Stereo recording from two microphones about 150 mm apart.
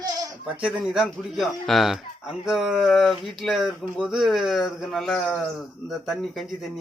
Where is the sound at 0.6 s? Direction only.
Centre (ahead or behind).